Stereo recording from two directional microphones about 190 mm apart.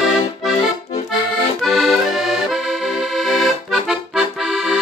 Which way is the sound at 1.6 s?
Centre (ahead or behind).